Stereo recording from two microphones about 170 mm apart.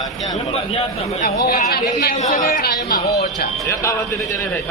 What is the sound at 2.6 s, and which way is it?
Speech, 65° left (ahead or behind).